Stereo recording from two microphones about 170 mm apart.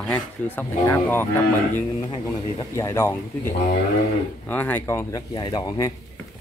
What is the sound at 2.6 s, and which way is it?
Speech, 20° left (ahead or behind).